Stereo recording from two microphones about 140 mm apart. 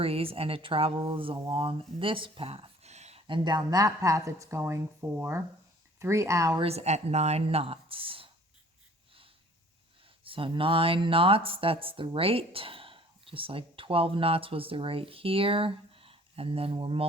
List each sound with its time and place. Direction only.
0.0 s speech: 45° right (ahead or behind); by 6.6 s 25° right (ahead or behind)
6.6 s speech: 45° right (ahead or behind)
10.2 s speech: 40° right (ahead or behind)